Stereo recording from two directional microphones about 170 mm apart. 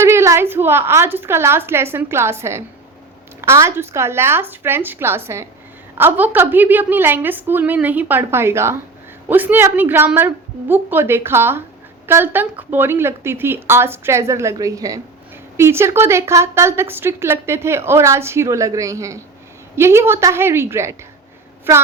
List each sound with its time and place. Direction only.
0.0 s a woman's voice: 15° right (ahead or behind)